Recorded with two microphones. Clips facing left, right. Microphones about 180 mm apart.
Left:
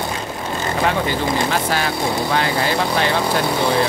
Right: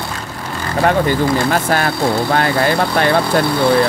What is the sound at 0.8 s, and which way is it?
Speech, 50° right (ahead or behind).